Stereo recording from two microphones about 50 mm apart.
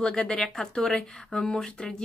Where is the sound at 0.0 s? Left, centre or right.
Centre.